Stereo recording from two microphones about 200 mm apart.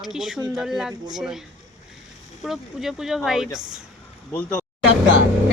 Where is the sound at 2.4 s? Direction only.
Centre (ahead or behind).